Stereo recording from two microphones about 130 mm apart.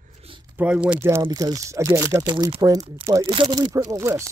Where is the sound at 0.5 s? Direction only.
10° right (ahead or behind).